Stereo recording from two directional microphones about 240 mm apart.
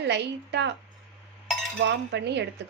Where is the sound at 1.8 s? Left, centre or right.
Right.